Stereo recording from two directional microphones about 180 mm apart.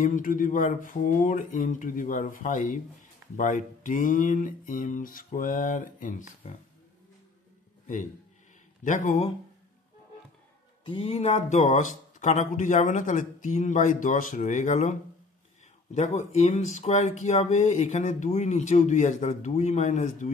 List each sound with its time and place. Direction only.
0.0 s speech: 50° left (ahead or behind)
7.8 s a sound: 45° left (ahead or behind)
8.8 s speech: 45° left (ahead or behind)
10.9 s speech: 35° left (ahead or behind)